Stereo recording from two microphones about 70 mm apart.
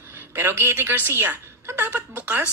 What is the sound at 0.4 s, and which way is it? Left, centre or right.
Speech, right.